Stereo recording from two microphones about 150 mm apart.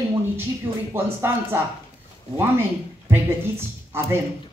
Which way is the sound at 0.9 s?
15° right (ahead or behind).